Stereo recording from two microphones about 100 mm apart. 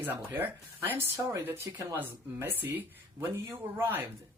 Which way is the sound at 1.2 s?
30° right (ahead or behind).